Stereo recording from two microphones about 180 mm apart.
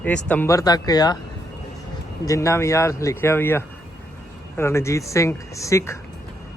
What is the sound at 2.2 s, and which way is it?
Speech, 15° left (ahead or behind).